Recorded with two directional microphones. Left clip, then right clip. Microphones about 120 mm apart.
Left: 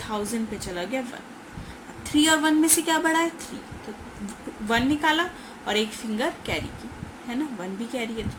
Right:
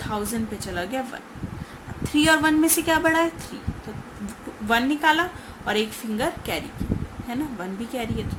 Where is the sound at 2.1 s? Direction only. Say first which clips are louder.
Right 2 dB; 40° right (ahead or behind).